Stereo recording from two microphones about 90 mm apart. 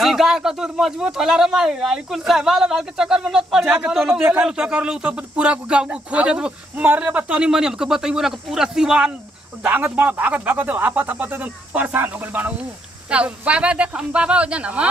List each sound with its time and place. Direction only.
0.0 s speech: centre (ahead or behind)
9.6 s speech: 20° right (ahead or behind)